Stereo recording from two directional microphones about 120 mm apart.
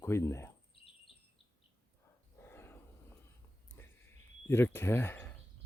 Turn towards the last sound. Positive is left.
turn(degrees=20)  # may be behind; listen again after turning